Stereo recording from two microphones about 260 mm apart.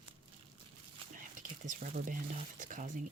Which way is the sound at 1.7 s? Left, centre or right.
Right.